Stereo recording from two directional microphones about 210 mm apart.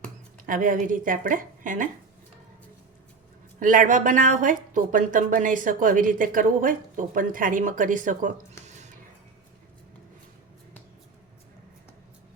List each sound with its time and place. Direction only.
0.4 s a woman's voice: 40° right (ahead or behind)
3.6 s a woman's voice: 40° right (ahead or behind)
8.6 s dishes: 35° right (ahead or behind)